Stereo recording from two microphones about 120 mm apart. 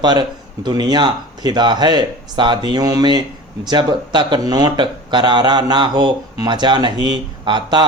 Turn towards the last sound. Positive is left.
turn(degrees=-40)  # may be behind; listen again after turning